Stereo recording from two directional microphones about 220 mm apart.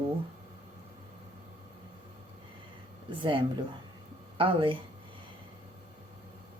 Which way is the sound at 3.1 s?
20° right (ahead or behind).